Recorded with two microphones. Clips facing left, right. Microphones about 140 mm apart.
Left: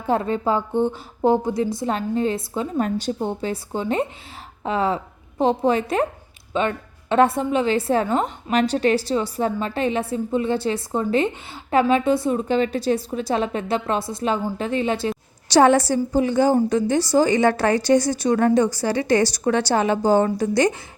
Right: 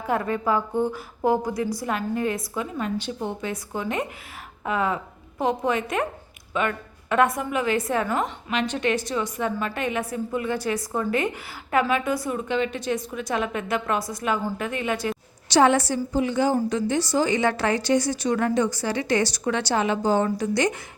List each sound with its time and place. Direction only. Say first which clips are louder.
0.1 s a woman's voice: left 3 dB; 25° left (ahead or behind)
2.7 s a woman's voice: left 8 dB; 40° left (ahead or behind)